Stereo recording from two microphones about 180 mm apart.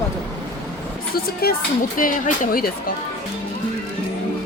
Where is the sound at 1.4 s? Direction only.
60° left (ahead or behind).